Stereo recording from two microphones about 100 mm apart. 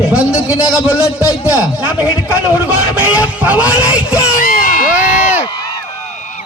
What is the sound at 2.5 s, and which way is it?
A man's voice, 15° right (ahead or behind).